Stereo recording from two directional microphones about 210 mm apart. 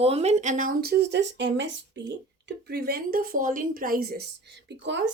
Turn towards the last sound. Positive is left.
turn(degrees=-55)  # may be behind; listen again after turning